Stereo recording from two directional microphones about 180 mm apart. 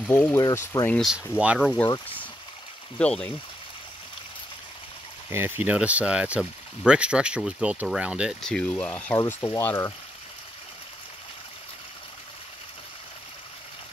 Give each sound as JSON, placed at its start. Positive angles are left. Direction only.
{"t": 0.1, "sound": "speech", "side_deg": 10}
{"t": 0.8, "sound": "speech", "side_deg": 0}
{"t": 3.0, "sound": "speech", "side_deg": 5}
{"t": 5.3, "sound": "speech", "side_deg": -10}